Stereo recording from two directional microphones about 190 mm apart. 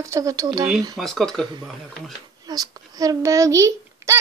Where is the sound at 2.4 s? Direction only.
20° right (ahead or behind).